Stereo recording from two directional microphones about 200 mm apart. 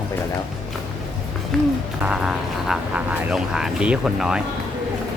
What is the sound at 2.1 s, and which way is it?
Speech, 5° right (ahead or behind).